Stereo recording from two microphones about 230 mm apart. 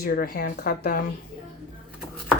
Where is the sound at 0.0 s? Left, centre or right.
Left.